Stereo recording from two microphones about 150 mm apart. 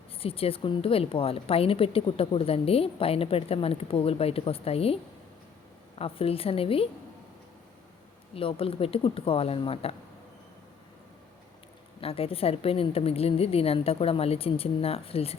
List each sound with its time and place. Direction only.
0.2 s a woman's voice: 40° left (ahead or behind)
6.0 s a woman's voice: 40° left (ahead or behind)
8.4 s a woman's voice: 40° left (ahead or behind)
11.9 s a woman's voice: 40° left (ahead or behind)